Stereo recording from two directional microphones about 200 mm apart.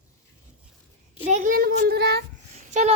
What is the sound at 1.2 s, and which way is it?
A child's voice, 35° right (ahead or behind).